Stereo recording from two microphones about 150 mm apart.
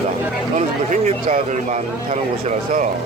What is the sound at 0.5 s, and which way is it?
Speech, 55° right (ahead or behind).